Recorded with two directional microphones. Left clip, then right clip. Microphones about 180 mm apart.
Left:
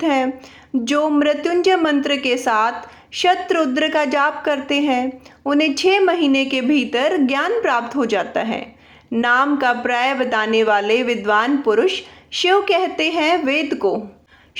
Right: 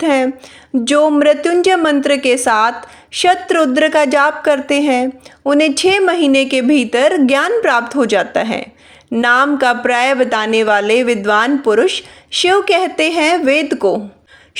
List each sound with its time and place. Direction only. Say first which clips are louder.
0.0 s a woman's voice: right 4 dB; 35° right (ahead or behind)